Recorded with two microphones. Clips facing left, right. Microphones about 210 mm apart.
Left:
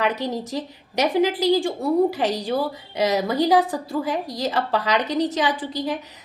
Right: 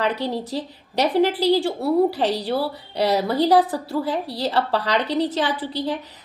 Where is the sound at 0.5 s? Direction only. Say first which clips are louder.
Right 1 dB; 15° left (ahead or behind).